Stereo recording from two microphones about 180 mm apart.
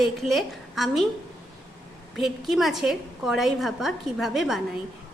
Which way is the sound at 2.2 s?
Centre (ahead or behind).